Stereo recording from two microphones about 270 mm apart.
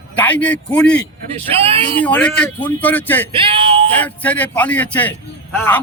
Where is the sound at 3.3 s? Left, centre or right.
Centre.